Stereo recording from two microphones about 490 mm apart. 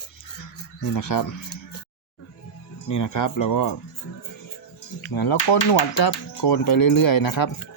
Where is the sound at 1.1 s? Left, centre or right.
Left.